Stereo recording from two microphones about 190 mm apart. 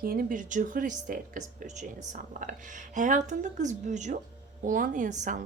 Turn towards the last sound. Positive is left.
turn(degrees=-45)  # may be behind; listen again after turning